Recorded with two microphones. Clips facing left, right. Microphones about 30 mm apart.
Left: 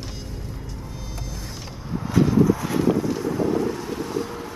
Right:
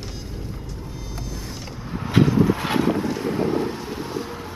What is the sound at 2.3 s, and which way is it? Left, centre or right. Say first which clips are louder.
Vehicle: even; right.